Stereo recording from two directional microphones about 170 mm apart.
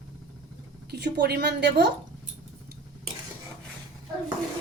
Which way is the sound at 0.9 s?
75° right (ahead or behind).